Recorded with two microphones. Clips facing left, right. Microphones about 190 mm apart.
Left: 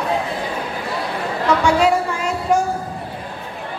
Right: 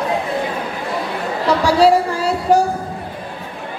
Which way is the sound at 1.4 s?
35° right (ahead or behind).